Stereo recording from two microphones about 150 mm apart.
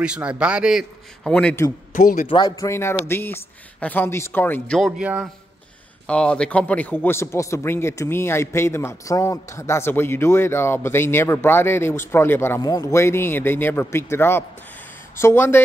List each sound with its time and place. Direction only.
0.0 s a man's voice: 5° right (ahead or behind)
1.9 s speech: 60° left (ahead or behind)
2.2 s a man's voice: 30° left (ahead or behind); by 4.7 s 15° left (ahead or behind)
4.7 s a man's voice: 5° right (ahead or behind)
6.0 s a man's voice: 5° left (ahead or behind)